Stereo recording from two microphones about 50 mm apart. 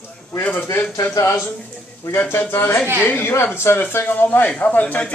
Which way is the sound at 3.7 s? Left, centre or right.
Left.